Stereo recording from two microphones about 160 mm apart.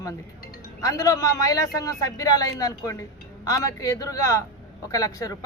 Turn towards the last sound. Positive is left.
turn(degrees=20)  # may be behind; listen again after turning